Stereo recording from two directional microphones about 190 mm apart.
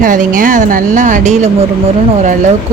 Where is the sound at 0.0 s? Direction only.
45° right (ahead or behind).